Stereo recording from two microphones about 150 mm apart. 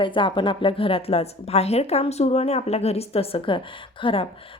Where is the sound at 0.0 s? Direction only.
35° left (ahead or behind).